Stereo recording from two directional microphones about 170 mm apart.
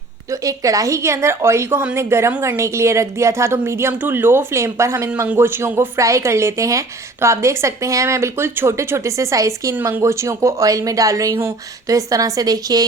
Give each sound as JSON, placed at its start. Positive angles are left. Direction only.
{"t": 0.3, "sound": "a woman's voice", "side_deg": -20}